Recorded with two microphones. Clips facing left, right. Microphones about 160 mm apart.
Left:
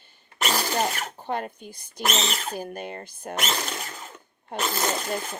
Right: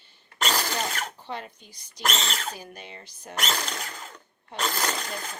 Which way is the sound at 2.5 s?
50° left (ahead or behind).